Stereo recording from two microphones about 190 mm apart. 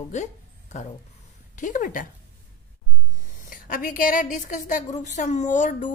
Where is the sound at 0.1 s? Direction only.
40° left (ahead or behind).